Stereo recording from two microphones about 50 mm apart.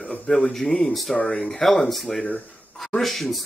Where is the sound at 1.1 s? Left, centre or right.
Left.